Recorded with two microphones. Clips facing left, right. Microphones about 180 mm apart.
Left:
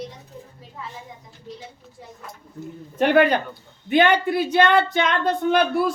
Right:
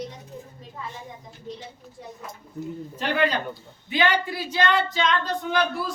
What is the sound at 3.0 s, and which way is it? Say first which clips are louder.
Speech: left 8 dB; 55° left (ahead or behind).